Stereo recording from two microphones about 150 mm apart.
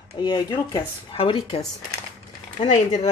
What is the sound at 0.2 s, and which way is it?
Speech, 25° left (ahead or behind).